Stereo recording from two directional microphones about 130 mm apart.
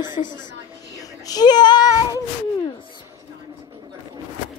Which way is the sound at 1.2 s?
30° left (ahead or behind).